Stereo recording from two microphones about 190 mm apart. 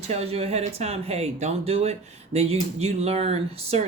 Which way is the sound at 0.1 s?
35° right (ahead or behind).